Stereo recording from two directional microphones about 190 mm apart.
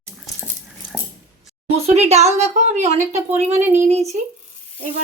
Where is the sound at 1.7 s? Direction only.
35° right (ahead or behind).